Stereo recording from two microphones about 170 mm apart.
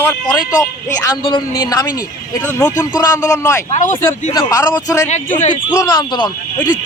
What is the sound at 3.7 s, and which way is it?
Speech, 50° left (ahead or behind).